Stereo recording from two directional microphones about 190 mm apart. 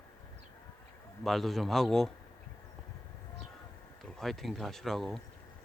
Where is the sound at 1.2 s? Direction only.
Centre (ahead or behind).